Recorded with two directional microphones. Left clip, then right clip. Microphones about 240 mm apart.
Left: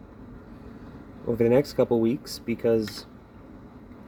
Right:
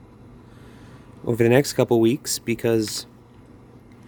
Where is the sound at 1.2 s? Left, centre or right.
Right.